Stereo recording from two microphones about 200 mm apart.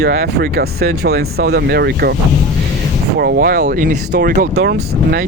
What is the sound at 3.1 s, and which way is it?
Speech, 50° right (ahead or behind).